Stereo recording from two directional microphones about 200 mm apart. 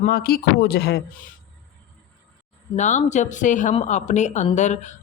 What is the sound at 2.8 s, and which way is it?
A woman's voice, 35° left (ahead or behind).